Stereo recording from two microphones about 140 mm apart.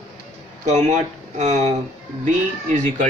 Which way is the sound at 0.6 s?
55° right (ahead or behind).